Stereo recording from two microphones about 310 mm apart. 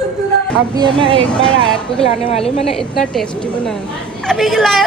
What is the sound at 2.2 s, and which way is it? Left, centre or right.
Speech, centre.